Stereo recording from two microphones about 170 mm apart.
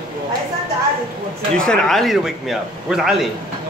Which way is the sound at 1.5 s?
5° left (ahead or behind).